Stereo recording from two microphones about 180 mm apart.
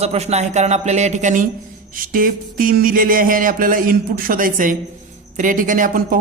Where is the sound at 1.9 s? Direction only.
50° right (ahead or behind).